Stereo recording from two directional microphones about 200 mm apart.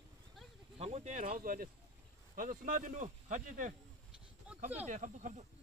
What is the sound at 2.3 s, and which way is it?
Speech, 45° right (ahead or behind).